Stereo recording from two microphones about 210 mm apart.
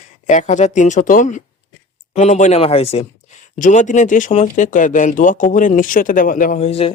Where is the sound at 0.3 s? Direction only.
35° left (ahead or behind).